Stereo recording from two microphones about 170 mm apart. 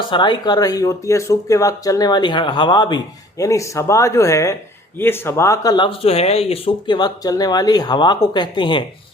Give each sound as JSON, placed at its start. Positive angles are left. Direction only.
{"t": 0.1, "sound": "speech", "side_deg": 25}